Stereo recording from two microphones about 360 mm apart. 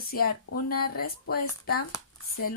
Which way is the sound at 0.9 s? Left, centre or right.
Left.